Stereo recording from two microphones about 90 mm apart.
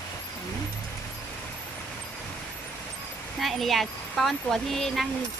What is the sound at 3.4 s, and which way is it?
Speech, centre (ahead or behind).